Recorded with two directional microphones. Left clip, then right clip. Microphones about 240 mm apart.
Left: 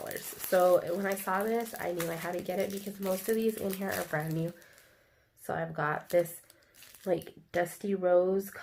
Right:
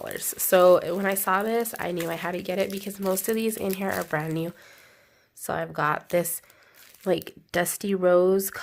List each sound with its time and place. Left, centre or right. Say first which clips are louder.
0.0 s speech: right 7 dB; right
5.5 s speech: right 7 dB; right